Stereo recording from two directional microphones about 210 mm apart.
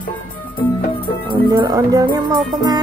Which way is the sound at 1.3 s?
15° right (ahead or behind).